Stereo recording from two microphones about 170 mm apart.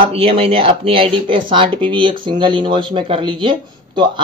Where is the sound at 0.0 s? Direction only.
35° right (ahead or behind).